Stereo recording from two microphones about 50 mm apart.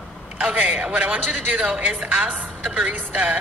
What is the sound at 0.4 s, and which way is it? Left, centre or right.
A woman's voice, right.